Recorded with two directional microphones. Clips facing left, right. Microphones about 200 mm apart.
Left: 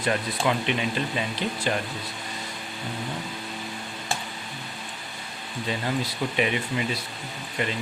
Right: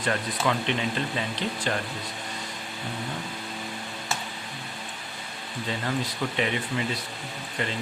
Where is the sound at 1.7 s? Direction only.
10° left (ahead or behind).